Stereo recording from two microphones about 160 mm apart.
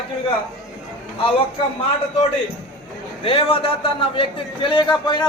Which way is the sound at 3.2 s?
35° left (ahead or behind).